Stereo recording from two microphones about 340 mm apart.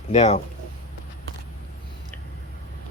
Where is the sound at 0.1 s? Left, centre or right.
Centre.